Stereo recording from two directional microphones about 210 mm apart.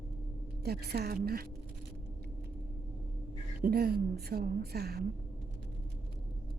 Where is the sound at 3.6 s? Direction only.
45° right (ahead or behind).